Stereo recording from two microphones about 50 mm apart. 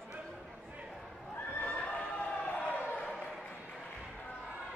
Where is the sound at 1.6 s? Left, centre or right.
Left.